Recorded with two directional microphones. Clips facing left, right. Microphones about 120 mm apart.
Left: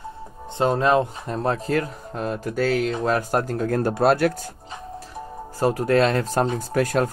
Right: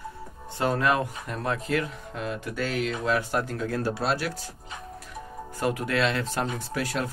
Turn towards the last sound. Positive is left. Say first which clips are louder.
# left 8 dB
turn(degrees=45)  # may be behind; listen again after turning